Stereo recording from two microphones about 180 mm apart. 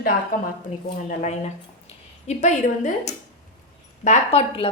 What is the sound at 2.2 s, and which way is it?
A woman's voice, 40° left (ahead or behind).